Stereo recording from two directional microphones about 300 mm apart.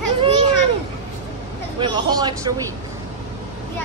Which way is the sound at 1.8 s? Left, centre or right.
Centre.